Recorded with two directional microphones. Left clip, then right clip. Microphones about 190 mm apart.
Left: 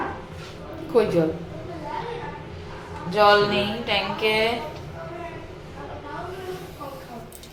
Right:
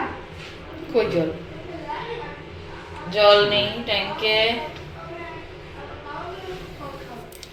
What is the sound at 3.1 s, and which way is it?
Speech, 10° left (ahead or behind).